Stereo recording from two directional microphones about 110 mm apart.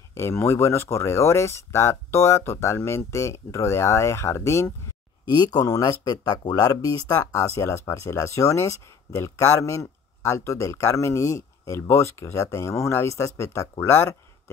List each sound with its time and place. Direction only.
0.1 s speech: 25° left (ahead or behind)
5.4 s speech: 35° left (ahead or behind)